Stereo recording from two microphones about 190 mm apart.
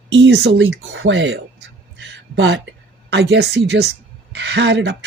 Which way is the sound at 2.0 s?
70° right (ahead or behind).